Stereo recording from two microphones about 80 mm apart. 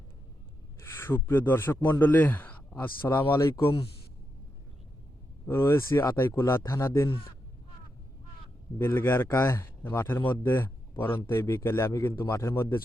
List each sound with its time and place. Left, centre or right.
0.8 s a man's voice: left
5.5 s a man's voice: left
8.8 s a man's voice: left